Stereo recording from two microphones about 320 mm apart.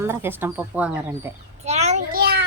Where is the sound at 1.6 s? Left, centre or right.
Right.